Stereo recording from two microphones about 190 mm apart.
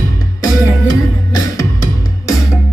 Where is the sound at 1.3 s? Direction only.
15° left (ahead or behind).